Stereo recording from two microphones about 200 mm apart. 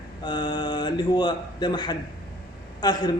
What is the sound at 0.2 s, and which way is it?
A man's voice, 20° left (ahead or behind).